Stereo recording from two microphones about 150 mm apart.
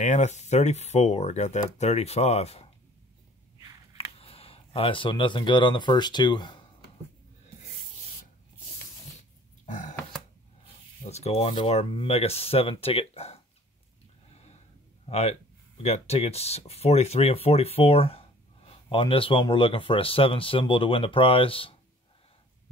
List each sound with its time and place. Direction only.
0.0 s speech: 50° left (ahead or behind)
4.0 s speech: 40° left (ahead or behind)
9.7 s burping: 55° left (ahead or behind)
11.1 s speech: 45° left (ahead or behind)
14.3 s a sound: 45° left (ahead or behind)
15.0 s speech: 45° left (ahead or behind)